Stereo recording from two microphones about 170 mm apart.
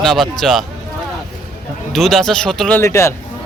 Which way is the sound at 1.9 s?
Centre (ahead or behind).